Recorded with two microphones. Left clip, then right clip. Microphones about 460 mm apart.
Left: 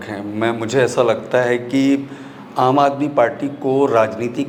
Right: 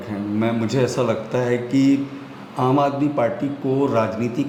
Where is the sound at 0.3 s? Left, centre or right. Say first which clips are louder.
Left 5 dB; left.